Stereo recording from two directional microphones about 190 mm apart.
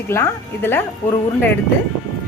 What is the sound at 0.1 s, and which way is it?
Speech, 15° left (ahead or behind).